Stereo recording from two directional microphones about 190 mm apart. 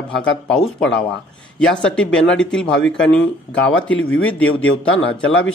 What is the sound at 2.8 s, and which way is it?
Speech, 75° left (ahead or behind).